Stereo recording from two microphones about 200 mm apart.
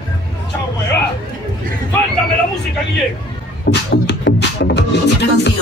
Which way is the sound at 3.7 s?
55° left (ahead or behind).